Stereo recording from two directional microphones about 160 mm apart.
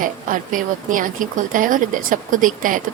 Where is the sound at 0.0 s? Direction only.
55° right (ahead or behind).